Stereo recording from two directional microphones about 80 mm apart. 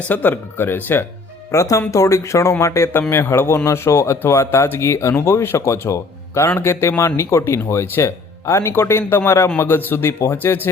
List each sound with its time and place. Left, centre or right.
0.1 s speech: left
1.5 s speech: left